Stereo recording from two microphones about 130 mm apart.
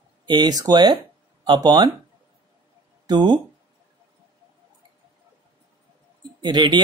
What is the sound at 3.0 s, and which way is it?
Speech, 35° right (ahead or behind).